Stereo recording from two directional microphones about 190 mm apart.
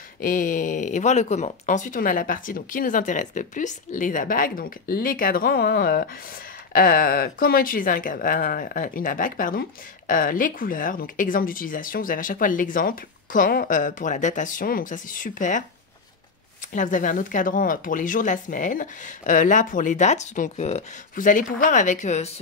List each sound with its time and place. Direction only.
0.2 s speech: 45° left (ahead or behind)
16.7 s speech: 45° left (ahead or behind)